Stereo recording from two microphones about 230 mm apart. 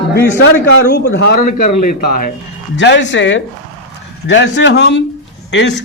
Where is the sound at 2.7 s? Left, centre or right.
Left.